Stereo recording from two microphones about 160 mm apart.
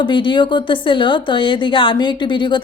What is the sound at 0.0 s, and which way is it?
Speech, 30° left (ahead or behind).